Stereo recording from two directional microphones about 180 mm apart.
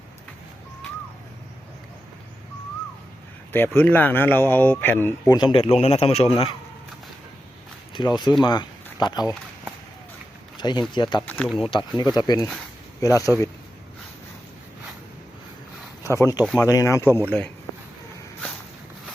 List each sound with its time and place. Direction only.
3.8 s a man's voice: 10° left (ahead or behind); by 6.6 s 30° left (ahead or behind)
7.9 s speech: 25° left (ahead or behind)
10.6 s speech: 25° left (ahead or behind)
11.3 s speech: 5° left (ahead or behind)
11.7 s speech: 25° left (ahead or behind)
13.3 s speech: 5° left (ahead or behind)
16.0 s speech: 15° left (ahead or behind)